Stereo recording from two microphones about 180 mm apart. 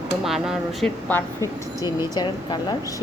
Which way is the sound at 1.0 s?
10° left (ahead or behind).